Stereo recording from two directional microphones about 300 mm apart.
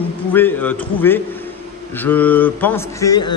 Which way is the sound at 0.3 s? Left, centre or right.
Centre.